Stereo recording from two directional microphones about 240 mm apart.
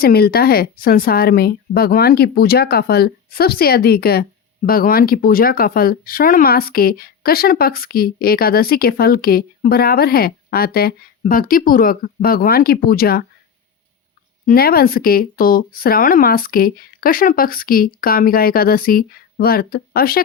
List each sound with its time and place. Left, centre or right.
0.0 s speech: left
14.4 s speech: left